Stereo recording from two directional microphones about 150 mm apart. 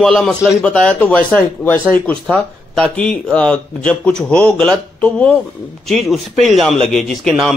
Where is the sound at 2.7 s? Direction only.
5° left (ahead or behind).